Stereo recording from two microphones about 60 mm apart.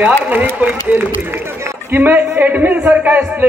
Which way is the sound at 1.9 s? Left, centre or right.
Right.